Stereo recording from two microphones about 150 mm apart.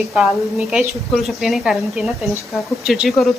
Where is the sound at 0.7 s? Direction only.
Centre (ahead or behind).